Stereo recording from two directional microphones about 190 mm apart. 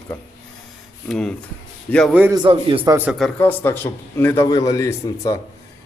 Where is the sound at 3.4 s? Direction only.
10° left (ahead or behind).